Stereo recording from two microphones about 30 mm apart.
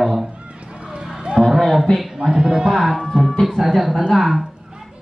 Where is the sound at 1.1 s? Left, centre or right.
Right.